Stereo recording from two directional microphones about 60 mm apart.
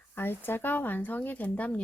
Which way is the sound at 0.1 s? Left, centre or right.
Left.